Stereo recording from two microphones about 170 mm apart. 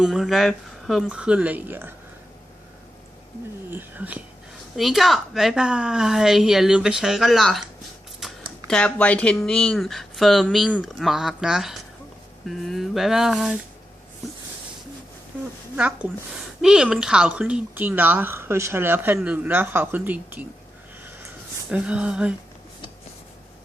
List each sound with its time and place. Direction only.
0.0 s speech: centre (ahead or behind)
3.7 s speech: 10° right (ahead or behind)
15.7 s speech: 10° right (ahead or behind)
21.7 s speech: 5° right (ahead or behind)